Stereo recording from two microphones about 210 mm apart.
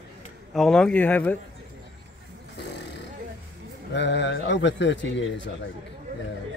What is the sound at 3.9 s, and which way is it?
A man's voice, 55° left (ahead or behind).